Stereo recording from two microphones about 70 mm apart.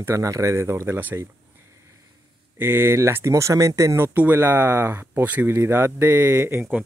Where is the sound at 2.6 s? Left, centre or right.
Right.